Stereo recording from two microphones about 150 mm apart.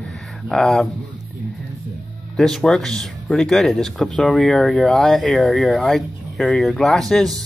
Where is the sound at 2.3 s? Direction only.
Centre (ahead or behind).